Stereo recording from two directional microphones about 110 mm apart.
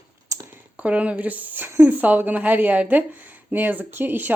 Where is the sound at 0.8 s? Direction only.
10° right (ahead or behind).